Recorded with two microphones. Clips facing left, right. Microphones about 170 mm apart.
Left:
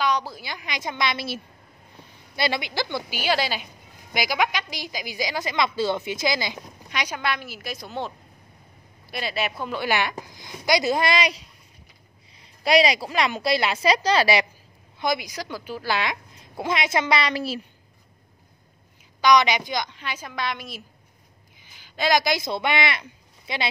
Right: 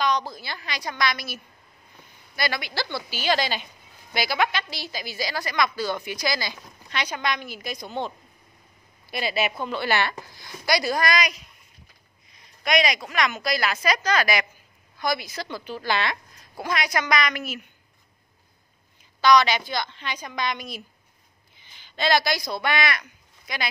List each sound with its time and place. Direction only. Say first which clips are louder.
0.0 s a woman's voice: even; 10° left (ahead or behind); by 14.4 s 30° left (ahead or behind)
15.0 s a woman's voice: left 1 dB; 15° left (ahead or behind)
16.3 s a woman's voice: left 3 dB; 25° left (ahead or behind)
19.2 s a woman's voice: even; 20° left (ahead or behind)